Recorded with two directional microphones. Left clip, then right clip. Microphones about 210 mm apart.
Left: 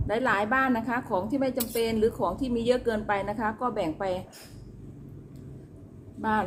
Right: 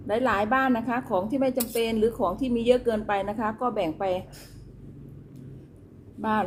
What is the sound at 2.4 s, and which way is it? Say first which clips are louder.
Speech: right 2 dB; 30° right (ahead or behind).